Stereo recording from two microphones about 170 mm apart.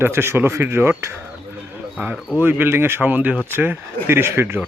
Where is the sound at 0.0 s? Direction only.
15° right (ahead or behind).